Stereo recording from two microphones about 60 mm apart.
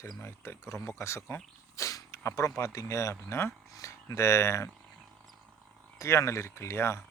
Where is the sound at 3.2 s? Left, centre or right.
Left.